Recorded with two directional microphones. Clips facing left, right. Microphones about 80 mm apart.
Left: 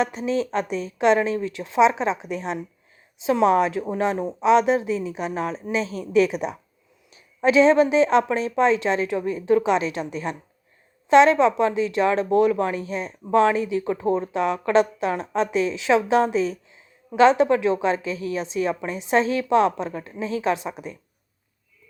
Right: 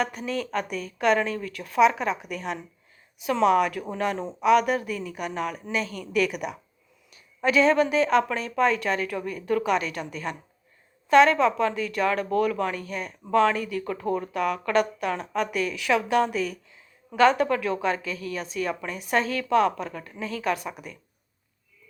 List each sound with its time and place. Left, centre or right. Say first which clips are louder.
0.0 s speech: left 5 dB; left